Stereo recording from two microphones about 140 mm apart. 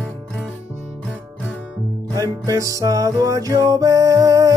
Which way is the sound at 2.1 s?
25° right (ahead or behind).